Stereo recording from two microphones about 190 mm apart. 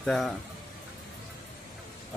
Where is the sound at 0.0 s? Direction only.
Centre (ahead or behind).